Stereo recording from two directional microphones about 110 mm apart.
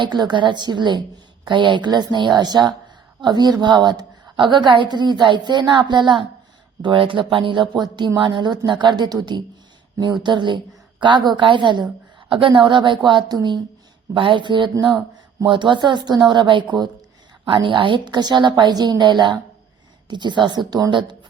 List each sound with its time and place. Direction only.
0.0 s a woman's voice: 40° right (ahead or behind)